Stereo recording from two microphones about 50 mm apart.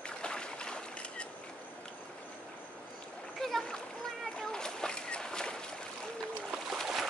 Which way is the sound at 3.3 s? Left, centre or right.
Centre.